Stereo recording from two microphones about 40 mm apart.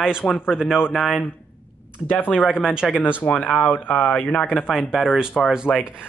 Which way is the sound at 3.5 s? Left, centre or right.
Left.